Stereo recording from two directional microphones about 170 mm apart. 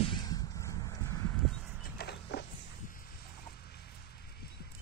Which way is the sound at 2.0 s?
75° left (ahead or behind).